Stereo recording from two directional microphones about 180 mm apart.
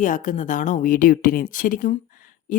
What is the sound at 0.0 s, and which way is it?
A woman's voice, 45° left (ahead or behind).